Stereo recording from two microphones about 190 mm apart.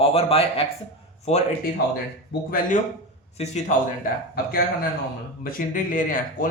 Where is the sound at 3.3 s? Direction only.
35° left (ahead or behind).